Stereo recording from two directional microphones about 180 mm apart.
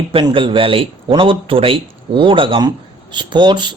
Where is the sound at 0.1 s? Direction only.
30° right (ahead or behind).